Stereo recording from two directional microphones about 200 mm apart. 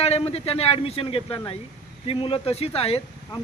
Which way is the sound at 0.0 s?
30° left (ahead or behind).